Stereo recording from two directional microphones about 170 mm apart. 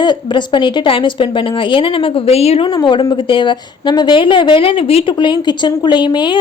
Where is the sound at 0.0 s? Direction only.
25° left (ahead or behind).